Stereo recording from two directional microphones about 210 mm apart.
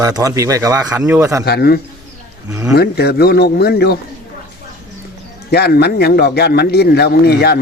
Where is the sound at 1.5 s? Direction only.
50° left (ahead or behind).